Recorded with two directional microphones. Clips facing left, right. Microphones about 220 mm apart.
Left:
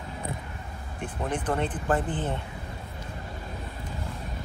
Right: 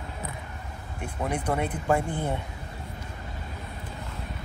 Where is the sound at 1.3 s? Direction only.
10° right (ahead or behind).